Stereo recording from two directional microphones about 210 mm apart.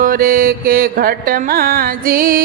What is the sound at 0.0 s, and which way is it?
Music, 45° right (ahead or behind).